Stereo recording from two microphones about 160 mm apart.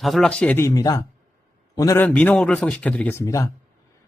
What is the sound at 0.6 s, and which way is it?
Speech, 20° left (ahead or behind).